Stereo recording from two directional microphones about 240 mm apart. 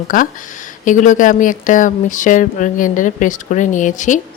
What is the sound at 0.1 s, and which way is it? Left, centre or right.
Speech, left.